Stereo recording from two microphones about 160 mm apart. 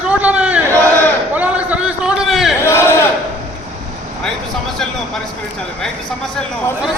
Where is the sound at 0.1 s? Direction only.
10° right (ahead or behind).